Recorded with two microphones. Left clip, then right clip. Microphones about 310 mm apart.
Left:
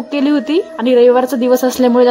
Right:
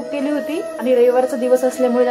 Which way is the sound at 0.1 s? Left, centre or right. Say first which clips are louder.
Left 7 dB; left.